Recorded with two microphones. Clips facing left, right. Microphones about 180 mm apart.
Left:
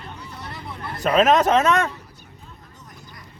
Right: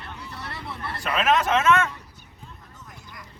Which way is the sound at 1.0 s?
40° left (ahead or behind).